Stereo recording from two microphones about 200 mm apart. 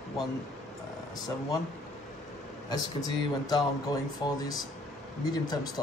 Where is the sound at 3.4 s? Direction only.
20° left (ahead or behind).